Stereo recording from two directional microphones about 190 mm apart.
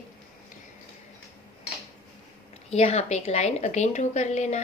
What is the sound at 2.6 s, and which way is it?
A woman's voice, 35° left (ahead or behind).